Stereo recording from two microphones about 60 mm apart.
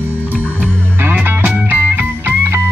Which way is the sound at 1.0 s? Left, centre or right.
Right.